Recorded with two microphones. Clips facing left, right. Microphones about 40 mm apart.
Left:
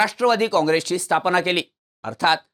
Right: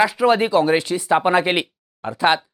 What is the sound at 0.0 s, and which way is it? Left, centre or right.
Speech, centre.